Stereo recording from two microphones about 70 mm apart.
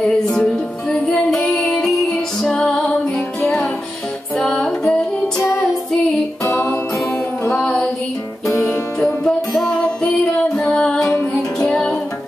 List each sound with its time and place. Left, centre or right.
0.5 s music: centre
4.4 s music: centre
6.4 s music: left
9.7 s music: centre